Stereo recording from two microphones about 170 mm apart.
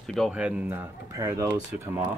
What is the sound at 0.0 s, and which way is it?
Speech, centre (ahead or behind).